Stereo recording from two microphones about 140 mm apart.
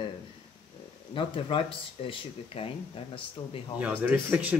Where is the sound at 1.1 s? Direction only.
35° left (ahead or behind).